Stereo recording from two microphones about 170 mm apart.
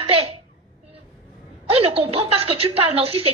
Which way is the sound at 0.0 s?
35° right (ahead or behind).